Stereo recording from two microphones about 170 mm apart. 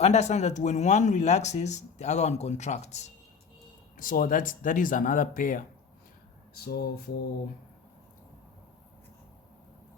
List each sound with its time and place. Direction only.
0.0 s speech: 40° left (ahead or behind)
3.9 s speech: 55° left (ahead or behind)
6.7 s mantra: 65° left (ahead or behind)